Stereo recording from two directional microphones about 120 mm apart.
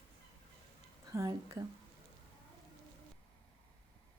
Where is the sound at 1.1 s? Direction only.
25° right (ahead or behind).